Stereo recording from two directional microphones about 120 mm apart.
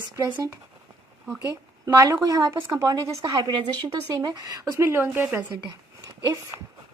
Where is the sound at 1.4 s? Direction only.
30° right (ahead or behind).